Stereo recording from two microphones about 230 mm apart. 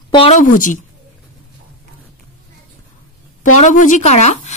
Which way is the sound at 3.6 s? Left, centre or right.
Left.